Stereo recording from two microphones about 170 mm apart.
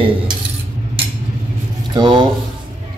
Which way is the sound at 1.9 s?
25° right (ahead or behind).